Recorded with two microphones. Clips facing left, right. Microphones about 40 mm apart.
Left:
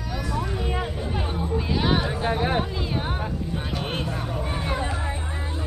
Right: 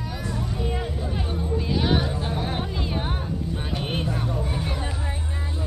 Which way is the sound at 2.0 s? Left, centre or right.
Left.